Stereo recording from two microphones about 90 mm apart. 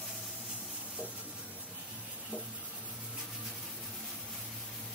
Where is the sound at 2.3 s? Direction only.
15° right (ahead or behind).